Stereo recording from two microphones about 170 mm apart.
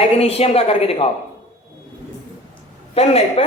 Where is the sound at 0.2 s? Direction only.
35° left (ahead or behind).